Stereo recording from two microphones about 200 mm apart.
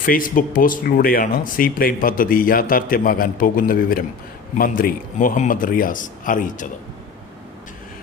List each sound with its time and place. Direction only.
0.0 s speech: 45° left (ahead or behind)